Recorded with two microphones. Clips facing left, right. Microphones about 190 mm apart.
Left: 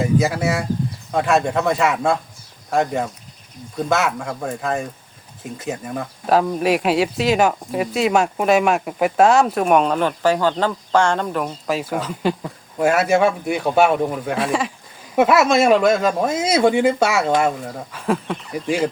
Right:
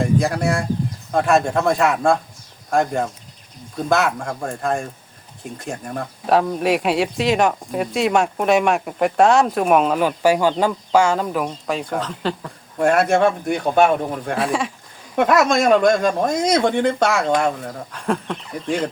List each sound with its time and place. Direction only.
0.0 s speech: 5° left (ahead or behind)